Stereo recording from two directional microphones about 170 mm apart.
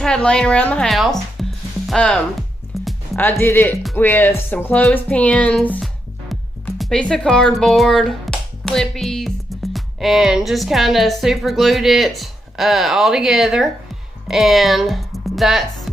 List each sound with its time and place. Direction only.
0.0 s speech: 5° left (ahead or behind)
2.7 s music: centre (ahead or behind)
3.2 s speech: 10° left (ahead or behind)